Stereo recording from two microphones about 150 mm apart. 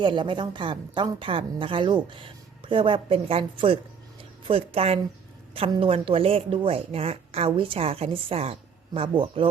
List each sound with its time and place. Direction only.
0.0 s speech: 30° right (ahead or behind)
4.2 s a sound: 40° right (ahead or behind)
5.5 s speech: 35° right (ahead or behind)